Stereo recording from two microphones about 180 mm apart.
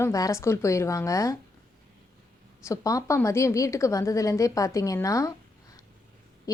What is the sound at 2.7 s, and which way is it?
A woman's voice, 15° left (ahead or behind).